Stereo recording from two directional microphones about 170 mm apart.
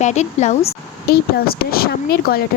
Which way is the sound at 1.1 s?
65° left (ahead or behind).